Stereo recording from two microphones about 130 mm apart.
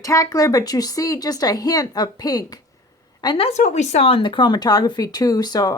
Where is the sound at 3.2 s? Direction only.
45° left (ahead or behind); by 5.7 s 30° left (ahead or behind).